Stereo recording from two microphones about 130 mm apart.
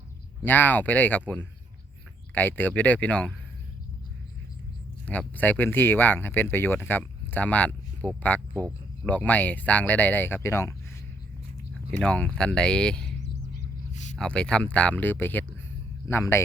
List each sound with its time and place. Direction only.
0.4 s speech: 15° left (ahead or behind)
2.3 s speech: 15° left (ahead or behind)
5.0 s speech: 10° left (ahead or behind)
11.7 s speech: 10° left (ahead or behind)
13.9 s a sound: 65° left (ahead or behind)
14.2 s a man's voice: 5° left (ahead or behind)